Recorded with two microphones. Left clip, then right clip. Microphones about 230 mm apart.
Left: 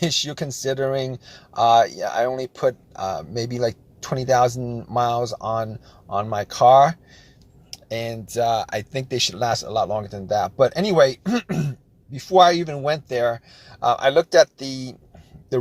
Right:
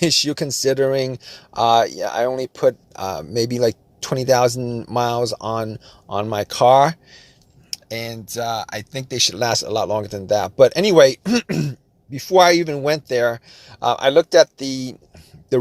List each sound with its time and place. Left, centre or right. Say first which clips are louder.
0.0 s speech: right 5 dB; right
7.7 s speech: even; centre
9.1 s speech: right 3 dB; right